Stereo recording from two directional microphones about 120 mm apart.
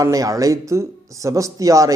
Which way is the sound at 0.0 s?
30° right (ahead or behind).